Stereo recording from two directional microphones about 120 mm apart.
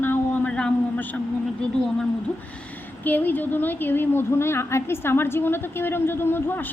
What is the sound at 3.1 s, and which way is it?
A woman's voice, 15° left (ahead or behind).